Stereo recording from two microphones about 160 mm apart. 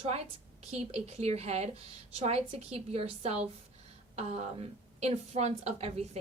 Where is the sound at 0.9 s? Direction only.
40° right (ahead or behind).